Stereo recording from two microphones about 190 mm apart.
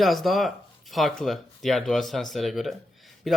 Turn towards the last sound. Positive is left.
turn(degrees=0)  # may be behind; listen again after turning